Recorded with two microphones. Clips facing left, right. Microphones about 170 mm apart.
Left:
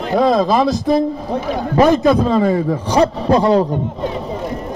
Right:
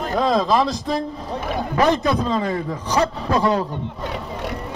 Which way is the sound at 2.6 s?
30° left (ahead or behind).